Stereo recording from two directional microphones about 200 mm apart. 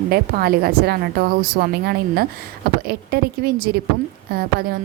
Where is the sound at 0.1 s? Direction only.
50° right (ahead or behind).